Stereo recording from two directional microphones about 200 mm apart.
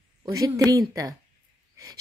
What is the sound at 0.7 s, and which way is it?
Speech, 15° right (ahead or behind).